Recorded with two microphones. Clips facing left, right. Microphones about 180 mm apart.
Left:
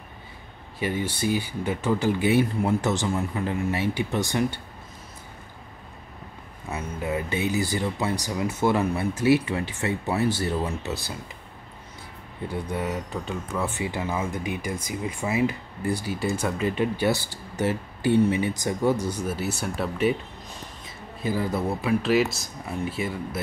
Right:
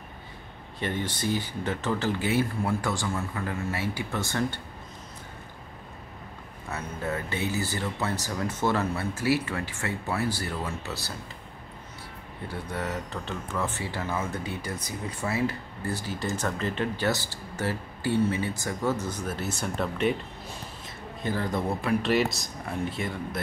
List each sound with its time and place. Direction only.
0.7 s speech: 10° left (ahead or behind)
6.7 s speech: 15° left (ahead or behind)
12.4 s speech: 15° left (ahead or behind)